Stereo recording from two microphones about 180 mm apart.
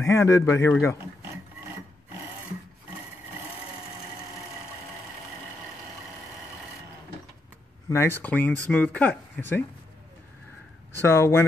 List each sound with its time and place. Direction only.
0.0 s speech: 15° left (ahead or behind)
7.9 s speech: 15° left (ahead or behind)
11.1 s speech: 15° left (ahead or behind)